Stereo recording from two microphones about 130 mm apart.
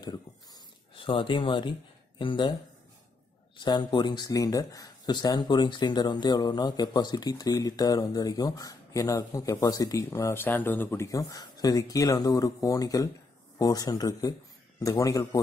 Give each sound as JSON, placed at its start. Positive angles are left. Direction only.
{"t": 0.0, "sound": "dog", "side_deg": 30}
{"t": 0.9, "sound": "speech", "side_deg": 40}
{"t": 3.5, "sound": "speech", "side_deg": 35}